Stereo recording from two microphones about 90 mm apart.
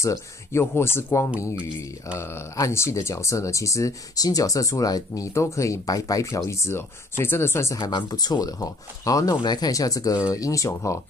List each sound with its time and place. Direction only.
0.0 s speech: 30° left (ahead or behind)
7.9 s speech: 50° left (ahead or behind)